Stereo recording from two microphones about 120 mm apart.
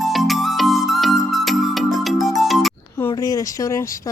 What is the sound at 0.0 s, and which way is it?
Music, centre (ahead or behind).